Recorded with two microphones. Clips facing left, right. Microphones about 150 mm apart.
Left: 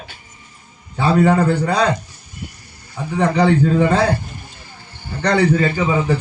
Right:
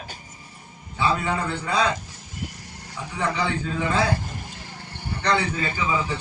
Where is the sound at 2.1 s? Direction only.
90° right.